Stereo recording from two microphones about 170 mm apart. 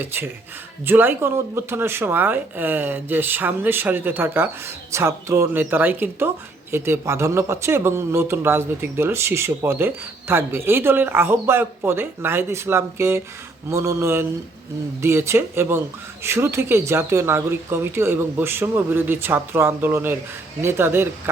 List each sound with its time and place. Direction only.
0.0 s speech: 10° right (ahead or behind)